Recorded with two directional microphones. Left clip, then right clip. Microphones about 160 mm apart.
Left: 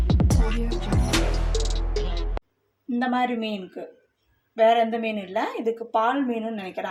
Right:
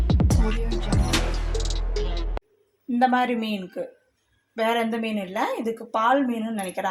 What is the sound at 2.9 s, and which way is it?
Speech, 25° right (ahead or behind).